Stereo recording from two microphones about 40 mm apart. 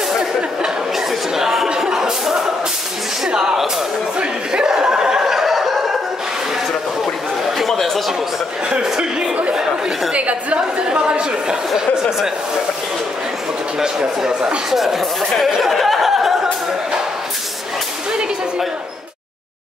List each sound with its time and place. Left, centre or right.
0.9 s a sound: centre
1.8 s chuckle: centre
3.3 s music: right
4.2 s chuckle: centre
7.4 s chatter: centre
7.7 s a sound: centre
8.8 s a sound: centre
10.1 s chatter: right
13.7 s speech: centre